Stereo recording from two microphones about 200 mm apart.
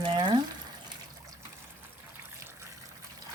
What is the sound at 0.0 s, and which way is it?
Frying, 25° right (ahead or behind).